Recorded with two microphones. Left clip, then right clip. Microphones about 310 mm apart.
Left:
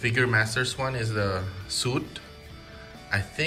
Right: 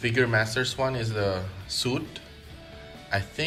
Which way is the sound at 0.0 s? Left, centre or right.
Centre.